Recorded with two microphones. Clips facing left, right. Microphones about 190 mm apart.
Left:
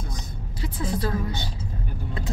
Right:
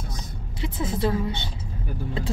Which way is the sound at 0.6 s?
25° right (ahead or behind).